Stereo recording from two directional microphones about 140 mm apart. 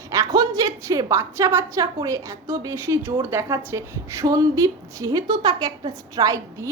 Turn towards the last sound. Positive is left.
turn(degrees=-25)  # may be behind; listen again after turning